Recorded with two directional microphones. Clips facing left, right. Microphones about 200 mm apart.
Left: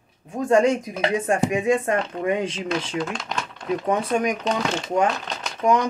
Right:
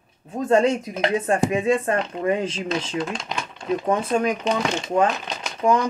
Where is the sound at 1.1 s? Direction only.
30° right (ahead or behind).